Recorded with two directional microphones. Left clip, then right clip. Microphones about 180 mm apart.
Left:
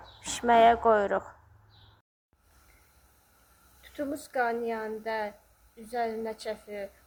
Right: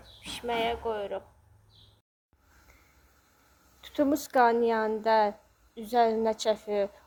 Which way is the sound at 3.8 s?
35° right (ahead or behind).